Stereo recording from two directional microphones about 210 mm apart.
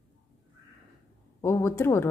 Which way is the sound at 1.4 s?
10° left (ahead or behind).